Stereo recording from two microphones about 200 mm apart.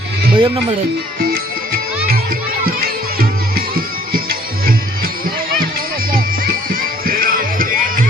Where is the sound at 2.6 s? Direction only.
45° right (ahead or behind).